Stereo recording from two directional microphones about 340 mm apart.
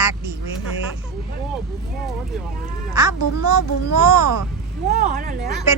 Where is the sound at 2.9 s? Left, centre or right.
Centre.